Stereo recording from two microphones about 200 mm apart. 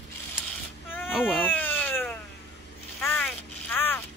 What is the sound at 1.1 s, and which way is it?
Speech, 5° right (ahead or behind).